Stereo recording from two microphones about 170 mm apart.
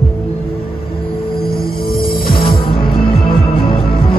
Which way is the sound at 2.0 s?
30° left (ahead or behind).